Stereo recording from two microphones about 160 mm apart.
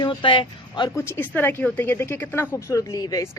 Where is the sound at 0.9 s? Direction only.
15° left (ahead or behind).